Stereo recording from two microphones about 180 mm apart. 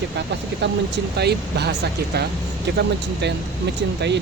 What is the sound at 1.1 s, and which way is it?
Speech, 65° right (ahead or behind).